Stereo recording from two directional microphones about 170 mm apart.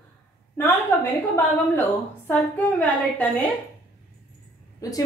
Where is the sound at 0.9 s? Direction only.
10° left (ahead or behind).